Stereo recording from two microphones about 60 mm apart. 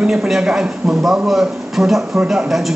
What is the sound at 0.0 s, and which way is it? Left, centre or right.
A woman's voice, centre.